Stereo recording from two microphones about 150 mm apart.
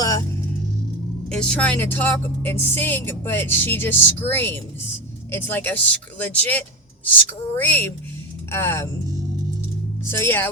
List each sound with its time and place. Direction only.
1.3 s speech: 5° left (ahead or behind)
10.0 s speech: 15° left (ahead or behind)